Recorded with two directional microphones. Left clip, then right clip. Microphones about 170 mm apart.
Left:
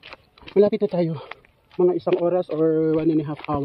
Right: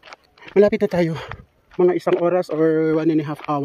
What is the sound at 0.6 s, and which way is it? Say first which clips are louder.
Speech: right 3 dB; 40° right (ahead or behind).